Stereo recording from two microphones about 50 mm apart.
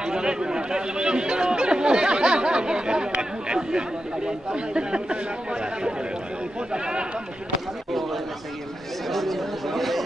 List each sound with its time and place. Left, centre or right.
0.0 s speech: centre
7.9 s chatter: centre
9.1 s speech: centre